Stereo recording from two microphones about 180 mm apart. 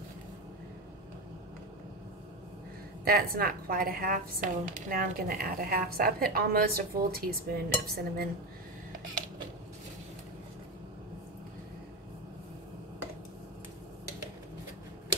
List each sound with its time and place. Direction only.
3.1 s speech: 55° right (ahead or behind)